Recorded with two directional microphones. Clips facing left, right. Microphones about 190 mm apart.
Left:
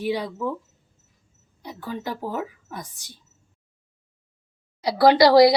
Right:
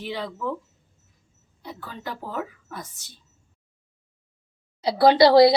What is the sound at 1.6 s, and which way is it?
Speech, 15° left (ahead or behind).